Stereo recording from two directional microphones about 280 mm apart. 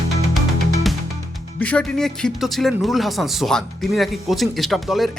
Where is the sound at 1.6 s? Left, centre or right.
Centre.